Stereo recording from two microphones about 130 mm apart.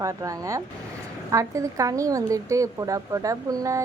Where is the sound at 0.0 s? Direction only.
25° right (ahead or behind).